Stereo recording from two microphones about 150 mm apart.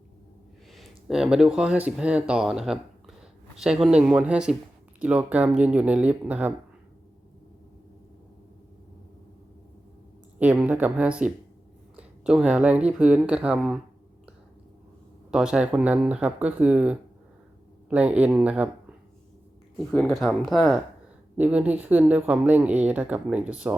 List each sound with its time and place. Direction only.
0.7 s speech: centre (ahead or behind)
10.4 s speech: 10° right (ahead or behind)
15.3 s speech: 5° right (ahead or behind)
19.7 s speech: 5° left (ahead or behind)
21.3 s speech: 10° right (ahead or behind)